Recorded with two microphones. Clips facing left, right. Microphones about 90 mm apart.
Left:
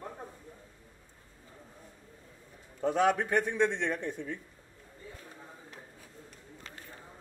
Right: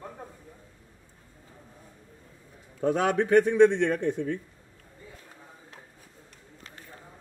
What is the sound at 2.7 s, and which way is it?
A man's voice, 65° right (ahead or behind).